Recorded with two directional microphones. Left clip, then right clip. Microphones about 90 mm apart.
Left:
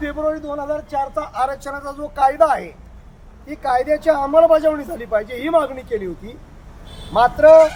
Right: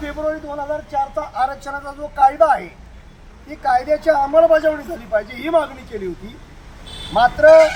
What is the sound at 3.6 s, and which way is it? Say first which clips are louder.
Speech: right 1 dB; 20° left (ahead or behind).